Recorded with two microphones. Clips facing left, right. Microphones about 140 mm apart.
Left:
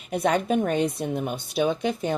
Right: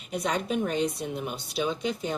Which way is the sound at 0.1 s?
55° left (ahead or behind).